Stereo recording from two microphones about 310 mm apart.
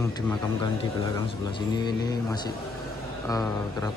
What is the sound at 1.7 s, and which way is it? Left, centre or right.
Speech, centre.